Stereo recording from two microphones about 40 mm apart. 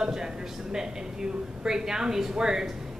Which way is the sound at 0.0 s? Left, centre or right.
Centre.